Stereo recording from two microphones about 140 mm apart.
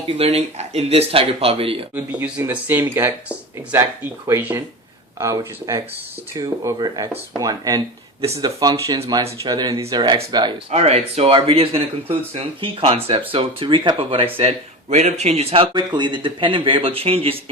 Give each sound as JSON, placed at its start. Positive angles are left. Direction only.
{"t": 0.1, "sound": "speech", "side_deg": -45}
{"t": 2.0, "sound": "speech", "side_deg": -10}
{"t": 10.7, "sound": "speech", "side_deg": -50}
{"t": 15.7, "sound": "speech", "side_deg": -35}